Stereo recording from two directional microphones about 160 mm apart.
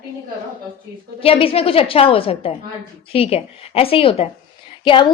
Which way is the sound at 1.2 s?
35° left (ahead or behind).